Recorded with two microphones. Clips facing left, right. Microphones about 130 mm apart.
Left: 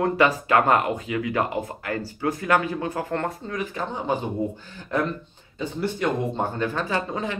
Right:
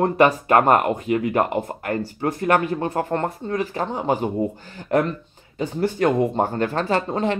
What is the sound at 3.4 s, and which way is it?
Speech, 35° right (ahead or behind).